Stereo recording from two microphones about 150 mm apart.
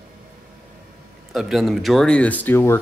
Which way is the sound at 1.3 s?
Centre (ahead or behind).